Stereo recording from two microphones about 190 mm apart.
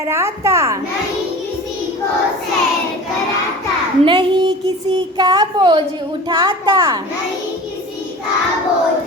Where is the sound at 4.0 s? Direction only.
25° right (ahead or behind).